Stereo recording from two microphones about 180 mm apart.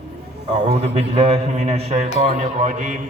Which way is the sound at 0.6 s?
35° right (ahead or behind).